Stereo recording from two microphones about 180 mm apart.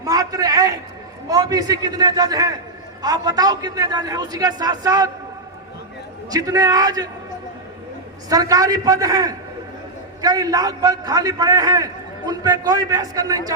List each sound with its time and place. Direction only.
0.0 s a man's voice: 20° right (ahead or behind)
6.3 s a man's voice: 20° right (ahead or behind)
8.3 s a man's voice: 20° right (ahead or behind)